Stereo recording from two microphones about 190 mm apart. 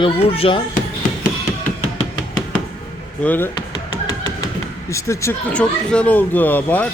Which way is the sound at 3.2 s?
10° left (ahead or behind).